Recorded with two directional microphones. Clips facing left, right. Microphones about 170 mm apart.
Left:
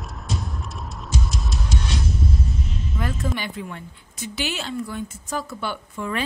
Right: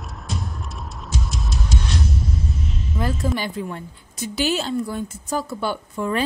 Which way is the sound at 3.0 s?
35° right (ahead or behind).